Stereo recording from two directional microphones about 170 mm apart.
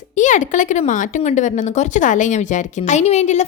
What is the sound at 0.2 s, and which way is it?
Speech, 45° left (ahead or behind).